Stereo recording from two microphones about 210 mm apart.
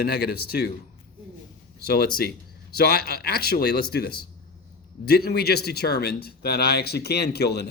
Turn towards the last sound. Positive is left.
turn(degrees=50)  # may be behind; listen again after turning